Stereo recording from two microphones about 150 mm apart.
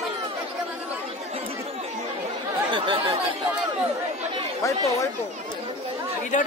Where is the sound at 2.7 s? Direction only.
35° right (ahead or behind).